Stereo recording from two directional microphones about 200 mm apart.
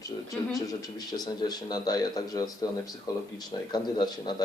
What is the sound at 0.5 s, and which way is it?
Speech, 20° left (ahead or behind).